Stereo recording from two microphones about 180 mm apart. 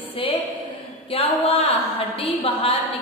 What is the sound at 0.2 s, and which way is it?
A woman's voice, 30° left (ahead or behind).